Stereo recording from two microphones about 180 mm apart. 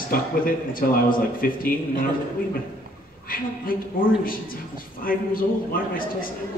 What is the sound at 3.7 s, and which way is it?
Speech, 50° left (ahead or behind).